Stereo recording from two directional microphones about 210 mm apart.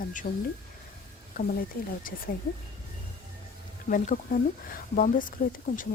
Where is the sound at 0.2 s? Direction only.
40° left (ahead or behind).